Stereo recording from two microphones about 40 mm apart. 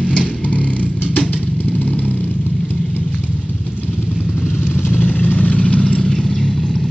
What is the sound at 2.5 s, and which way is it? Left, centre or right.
Vehicle, left.